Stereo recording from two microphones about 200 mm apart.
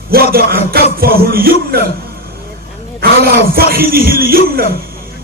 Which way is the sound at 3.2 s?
50° right (ahead or behind).